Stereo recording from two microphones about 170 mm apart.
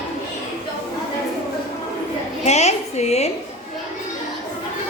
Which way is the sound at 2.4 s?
40° left (ahead or behind).